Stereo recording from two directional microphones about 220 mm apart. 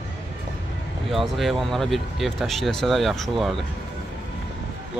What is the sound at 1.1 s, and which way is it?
Speech, centre (ahead or behind).